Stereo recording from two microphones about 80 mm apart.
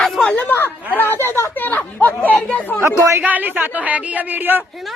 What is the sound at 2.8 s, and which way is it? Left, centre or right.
Speech, right.